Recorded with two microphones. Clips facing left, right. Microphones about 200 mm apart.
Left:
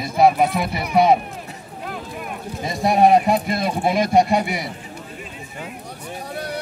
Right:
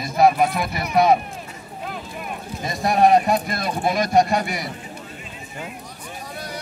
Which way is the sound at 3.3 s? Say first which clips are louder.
Left 2 dB; 25° left (ahead or behind).